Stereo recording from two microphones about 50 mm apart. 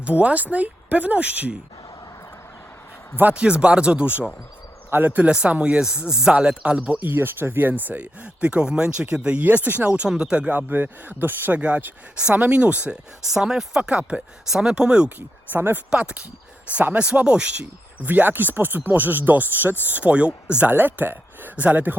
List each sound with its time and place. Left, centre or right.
0.0 s speech: right
3.3 s speech: right
5.3 s speech: right
7.0 s speech: right
7.9 s speech: right
9.4 s speech: right
10.1 s speech: centre
10.5 s speech: right
11.5 s speech: right
12.9 s speech: centre
15.5 s speech: right
15.9 s speech: right
18.0 s speech: right
20.7 s speech: right